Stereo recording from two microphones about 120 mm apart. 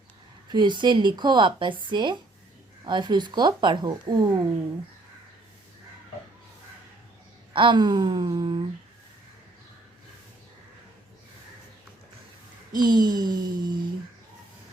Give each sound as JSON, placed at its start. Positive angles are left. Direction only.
{"t": 0.5, "sound": "speech", "side_deg": -40}
{"t": 7.5, "sound": "speech", "side_deg": -40}
{"t": 12.7, "sound": "speech", "side_deg": -35}